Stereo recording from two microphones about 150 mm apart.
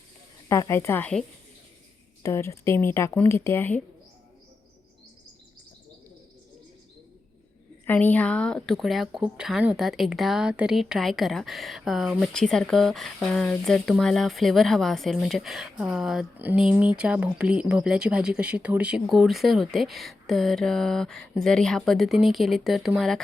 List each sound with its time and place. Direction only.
0.4 s speech: 20° left (ahead or behind)
2.2 s speech: 20° left (ahead or behind)
7.9 s speech: 10° left (ahead or behind)